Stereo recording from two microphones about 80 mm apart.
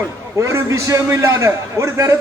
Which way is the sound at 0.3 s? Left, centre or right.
Right.